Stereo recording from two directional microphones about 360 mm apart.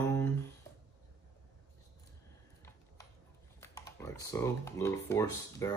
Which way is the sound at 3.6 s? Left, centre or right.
Centre.